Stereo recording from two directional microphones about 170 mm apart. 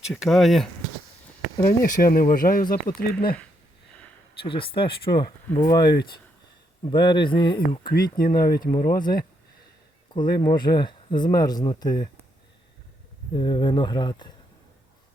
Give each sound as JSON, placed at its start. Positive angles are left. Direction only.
{"t": 0.1, "sound": "speech", "side_deg": 0}
{"t": 1.6, "sound": "speech", "side_deg": 55}
{"t": 4.4, "sound": "speech", "side_deg": 30}
{"t": 7.9, "sound": "speech", "side_deg": 60}
{"t": 8.3, "sound": "speech", "side_deg": 25}
{"t": 13.3, "sound": "speech", "side_deg": 30}